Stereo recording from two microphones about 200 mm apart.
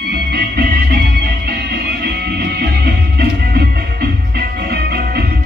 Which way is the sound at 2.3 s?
55° right (ahead or behind).